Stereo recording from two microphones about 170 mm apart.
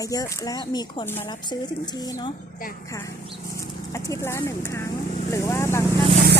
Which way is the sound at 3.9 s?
20° left (ahead or behind).